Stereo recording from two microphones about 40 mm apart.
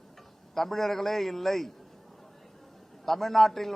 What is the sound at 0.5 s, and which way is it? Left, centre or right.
A man's voice, centre.